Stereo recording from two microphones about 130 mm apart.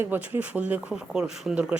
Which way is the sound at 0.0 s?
15° right (ahead or behind).